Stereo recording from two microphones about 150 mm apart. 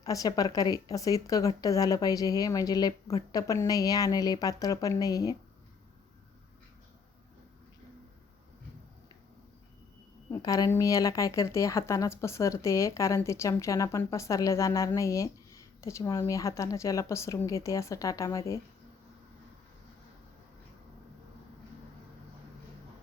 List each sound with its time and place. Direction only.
0.0 s speech: 25° left (ahead or behind)
10.3 s speech: 25° left (ahead or behind)